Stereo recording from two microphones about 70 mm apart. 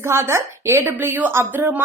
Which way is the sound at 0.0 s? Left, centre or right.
Right.